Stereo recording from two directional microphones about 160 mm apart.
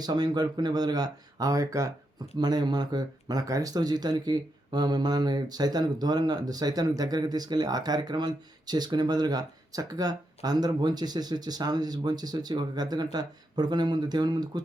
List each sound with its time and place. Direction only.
0.0 s speech: 25° right (ahead or behind)